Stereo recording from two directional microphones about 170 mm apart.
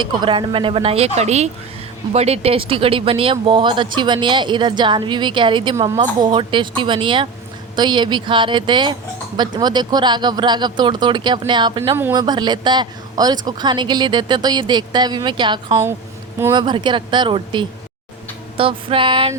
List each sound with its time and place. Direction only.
0.0 s a woman's voice: 30° right (ahead or behind)